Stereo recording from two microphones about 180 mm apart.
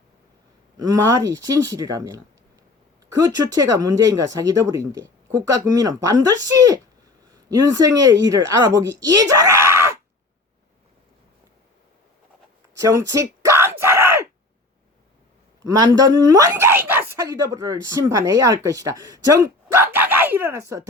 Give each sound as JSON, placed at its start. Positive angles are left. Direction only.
{"t": 0.8, "sound": "speech", "side_deg": -20}
{"t": 12.7, "sound": "a sound", "side_deg": -15}
{"t": 15.6, "sound": "a woman's voice", "side_deg": -20}